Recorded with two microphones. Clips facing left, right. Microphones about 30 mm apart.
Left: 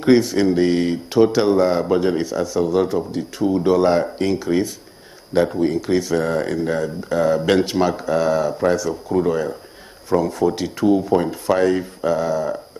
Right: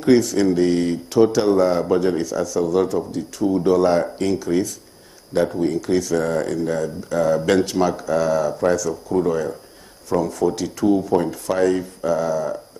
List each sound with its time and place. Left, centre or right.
0.0 s speech: left